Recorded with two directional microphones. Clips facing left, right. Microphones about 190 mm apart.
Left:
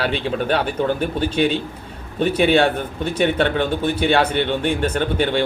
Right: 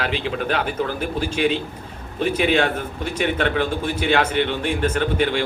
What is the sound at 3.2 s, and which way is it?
Speech, 30° left (ahead or behind).